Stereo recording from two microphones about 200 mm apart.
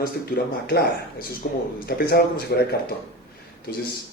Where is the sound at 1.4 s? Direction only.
50° left (ahead or behind).